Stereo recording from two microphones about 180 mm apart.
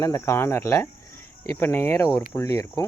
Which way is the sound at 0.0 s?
15° left (ahead or behind).